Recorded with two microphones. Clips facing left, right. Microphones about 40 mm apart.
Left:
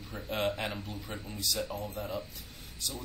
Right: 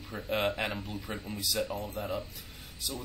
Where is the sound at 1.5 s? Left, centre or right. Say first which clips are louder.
Right 2 dB; right.